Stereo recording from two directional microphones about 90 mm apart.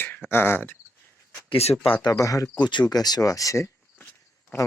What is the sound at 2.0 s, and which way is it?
Speech, 40° left (ahead or behind).